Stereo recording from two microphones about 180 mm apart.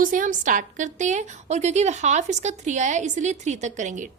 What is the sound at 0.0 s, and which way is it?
A woman's voice, 45° right (ahead or behind).